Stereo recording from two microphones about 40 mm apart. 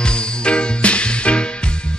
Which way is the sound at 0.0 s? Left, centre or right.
Left.